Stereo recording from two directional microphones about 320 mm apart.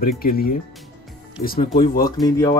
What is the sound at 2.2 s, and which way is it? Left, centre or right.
Speech, centre.